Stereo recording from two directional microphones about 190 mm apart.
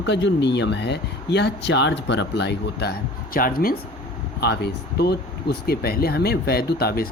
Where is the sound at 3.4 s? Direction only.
50° left (ahead or behind).